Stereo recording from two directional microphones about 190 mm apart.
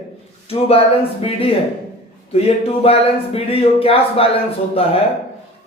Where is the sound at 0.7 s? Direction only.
30° left (ahead or behind).